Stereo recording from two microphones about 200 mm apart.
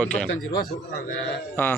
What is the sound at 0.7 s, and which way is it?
Speech, 55° left (ahead or behind).